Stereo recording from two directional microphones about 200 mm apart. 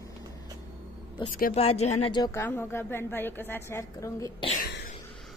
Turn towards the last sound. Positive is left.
turn(degrees=45)  # may be behind; listen again after turning